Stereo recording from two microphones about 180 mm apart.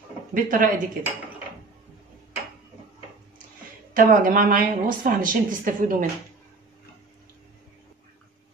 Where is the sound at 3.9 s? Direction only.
50° right (ahead or behind).